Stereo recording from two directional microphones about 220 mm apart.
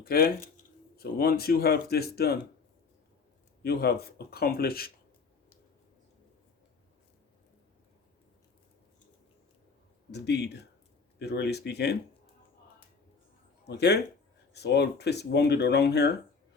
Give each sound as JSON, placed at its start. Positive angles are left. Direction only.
{"t": 0.0, "sound": "speech", "side_deg": 45}
{"t": 3.6, "sound": "speech", "side_deg": 45}
{"t": 10.1, "sound": "speech", "side_deg": 50}
{"t": 13.7, "sound": "speech", "side_deg": 50}